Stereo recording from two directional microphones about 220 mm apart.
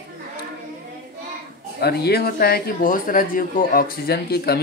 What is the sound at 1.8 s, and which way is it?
Speech, 45° left (ahead or behind).